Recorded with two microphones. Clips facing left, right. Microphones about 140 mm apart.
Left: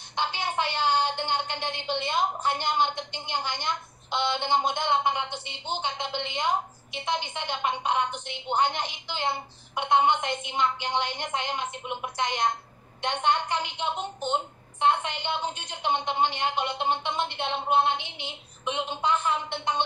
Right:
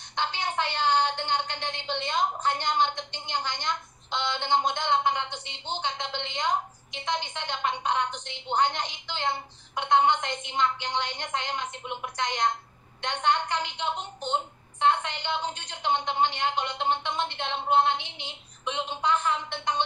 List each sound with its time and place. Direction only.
0.1 s a woman's voice: 15° left (ahead or behind)
0.9 s a sound: 10° left (ahead or behind)
2.0 s a woman's voice: 10° left (ahead or behind)
17.9 s a woman's voice: 20° right (ahead or behind)
18.2 s a woman's voice: 15° left (ahead or behind)